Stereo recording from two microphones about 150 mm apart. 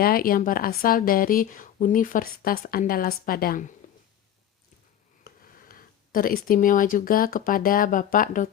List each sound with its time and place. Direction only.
0.0 s a woman's voice: 75° left (ahead or behind)
5.2 s speech: 75° left (ahead or behind)